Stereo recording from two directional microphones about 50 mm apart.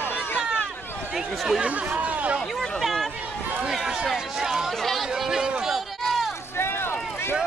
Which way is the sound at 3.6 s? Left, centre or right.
Centre.